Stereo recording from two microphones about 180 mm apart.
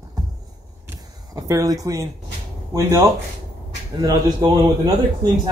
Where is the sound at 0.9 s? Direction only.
20° right (ahead or behind).